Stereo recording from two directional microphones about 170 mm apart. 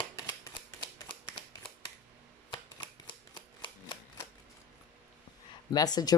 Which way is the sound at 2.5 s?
30° left (ahead or behind).